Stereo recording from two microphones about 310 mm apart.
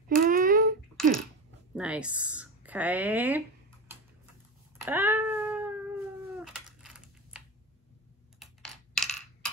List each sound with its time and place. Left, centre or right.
0.2 s a sound: right
1.8 s speech: centre
4.7 s cat: centre
8.4 s computer keyboard: centre